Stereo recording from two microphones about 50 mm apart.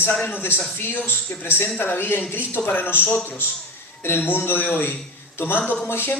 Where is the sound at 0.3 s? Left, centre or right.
Left.